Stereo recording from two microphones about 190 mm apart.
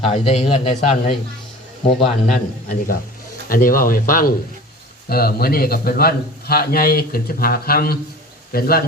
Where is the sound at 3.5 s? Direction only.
45° left (ahead or behind).